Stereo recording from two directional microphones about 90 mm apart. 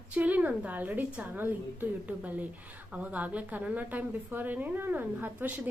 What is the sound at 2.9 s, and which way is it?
A woman's voice, 15° right (ahead or behind).